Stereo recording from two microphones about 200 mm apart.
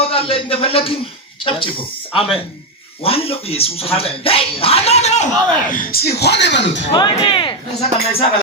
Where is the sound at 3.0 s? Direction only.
30° left (ahead or behind).